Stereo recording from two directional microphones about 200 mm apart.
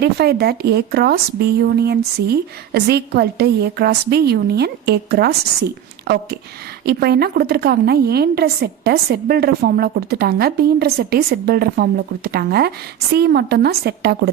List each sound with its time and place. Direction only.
0.0 s a woman's voice: 55° right (ahead or behind)